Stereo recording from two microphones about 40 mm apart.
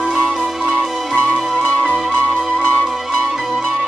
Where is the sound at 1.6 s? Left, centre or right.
Left.